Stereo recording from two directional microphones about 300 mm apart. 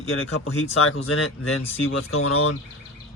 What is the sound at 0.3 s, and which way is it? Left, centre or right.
Speech, left.